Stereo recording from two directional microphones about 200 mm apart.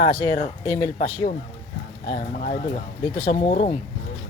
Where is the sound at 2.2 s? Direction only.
40° left (ahead or behind).